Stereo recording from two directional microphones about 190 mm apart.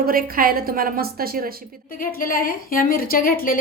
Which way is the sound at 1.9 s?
45° left (ahead or behind).